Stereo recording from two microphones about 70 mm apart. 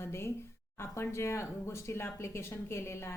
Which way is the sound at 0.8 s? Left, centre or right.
Left.